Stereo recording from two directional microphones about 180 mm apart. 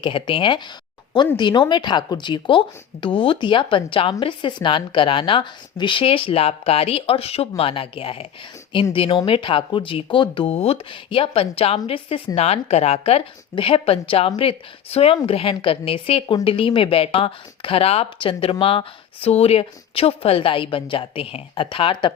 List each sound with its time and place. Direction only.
0.0 s speech: 30° left (ahead or behind)